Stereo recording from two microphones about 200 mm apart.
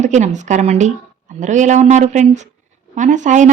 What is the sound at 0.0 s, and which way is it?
Speech, 35° right (ahead or behind).